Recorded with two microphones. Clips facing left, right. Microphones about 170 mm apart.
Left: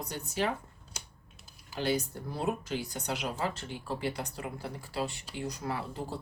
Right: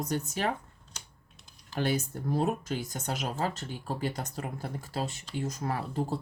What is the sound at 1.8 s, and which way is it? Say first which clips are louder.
Speech: right 1 dB; 50° right (ahead or behind).